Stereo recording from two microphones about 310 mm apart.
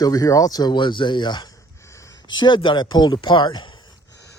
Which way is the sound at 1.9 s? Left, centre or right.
Centre.